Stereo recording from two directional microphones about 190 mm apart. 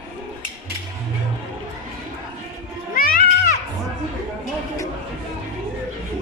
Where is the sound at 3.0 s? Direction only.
50° left (ahead or behind).